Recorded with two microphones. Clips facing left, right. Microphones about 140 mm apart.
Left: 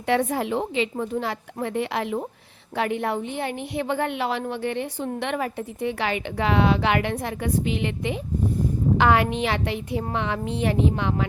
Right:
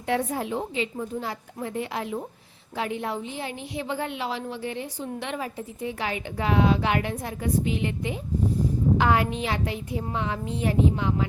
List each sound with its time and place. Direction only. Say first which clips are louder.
0.0 s a woman's voice: left 4 dB; 80° left